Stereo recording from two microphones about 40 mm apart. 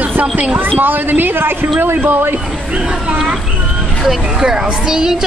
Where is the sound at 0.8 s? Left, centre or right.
Right.